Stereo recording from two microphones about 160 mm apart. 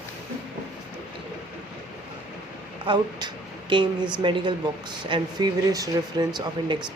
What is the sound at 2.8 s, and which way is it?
Speech, 30° right (ahead or behind).